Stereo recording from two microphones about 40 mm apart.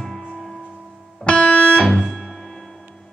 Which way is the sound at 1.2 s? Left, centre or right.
Left.